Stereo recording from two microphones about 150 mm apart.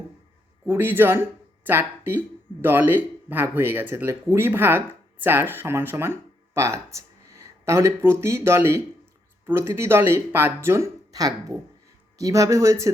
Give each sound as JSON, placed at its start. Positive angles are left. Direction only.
{"t": 0.6, "sound": "speech", "side_deg": -15}